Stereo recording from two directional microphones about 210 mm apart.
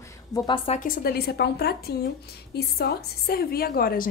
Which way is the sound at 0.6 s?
40° left (ahead or behind).